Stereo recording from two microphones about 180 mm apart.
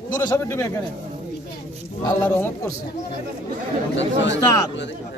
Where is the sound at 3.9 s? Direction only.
90° left.